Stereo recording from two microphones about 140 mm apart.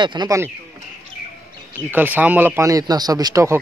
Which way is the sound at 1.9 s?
10° right (ahead or behind).